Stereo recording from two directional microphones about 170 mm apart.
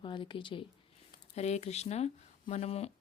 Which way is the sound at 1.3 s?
40° left (ahead or behind).